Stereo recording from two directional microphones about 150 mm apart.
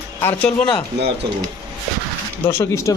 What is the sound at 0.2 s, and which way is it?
Speech, 10° left (ahead or behind).